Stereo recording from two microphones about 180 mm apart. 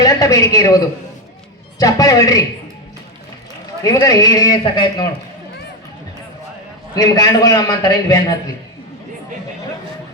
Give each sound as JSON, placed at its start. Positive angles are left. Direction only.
{"t": 0.0, "sound": "speech", "side_deg": 20}
{"t": 1.8, "sound": "a man's voice", "side_deg": 20}
{"t": 3.8, "sound": "a man's voice", "side_deg": 20}
{"t": 6.9, "sound": "a man's voice", "side_deg": 20}